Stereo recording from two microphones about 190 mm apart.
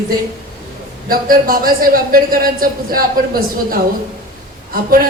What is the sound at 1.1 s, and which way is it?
Speech, 50° right (ahead or behind).